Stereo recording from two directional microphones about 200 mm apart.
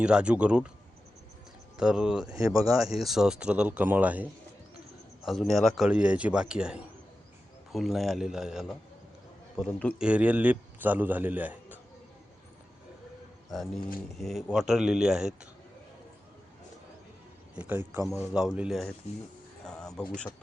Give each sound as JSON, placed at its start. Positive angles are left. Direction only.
{"t": 0.0, "sound": "speech", "side_deg": -5}
{"t": 1.8, "sound": "speech", "side_deg": -5}
{"t": 2.3, "sound": "a man's voice", "side_deg": -15}
{"t": 2.8, "sound": "a man's voice", "side_deg": 0}
{"t": 13.5, "sound": "speech", "side_deg": 0}
{"t": 17.5, "sound": "a man's voice", "side_deg": -10}
{"t": 19.6, "sound": "a sound", "side_deg": 5}